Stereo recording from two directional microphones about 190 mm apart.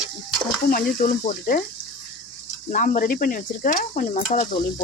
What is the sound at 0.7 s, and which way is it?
Speech, 50° left (ahead or behind).